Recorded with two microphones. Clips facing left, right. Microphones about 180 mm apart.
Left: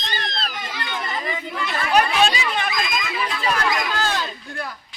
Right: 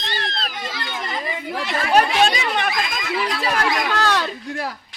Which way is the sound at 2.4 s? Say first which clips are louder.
Right 2 dB; 55° right (ahead or behind).